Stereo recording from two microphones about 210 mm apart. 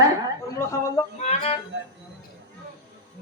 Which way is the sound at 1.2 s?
30° left (ahead or behind).